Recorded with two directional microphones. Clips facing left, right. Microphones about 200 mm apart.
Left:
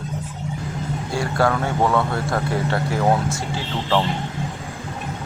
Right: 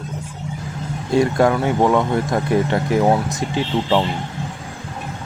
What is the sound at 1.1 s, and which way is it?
Speech, 20° right (ahead or behind).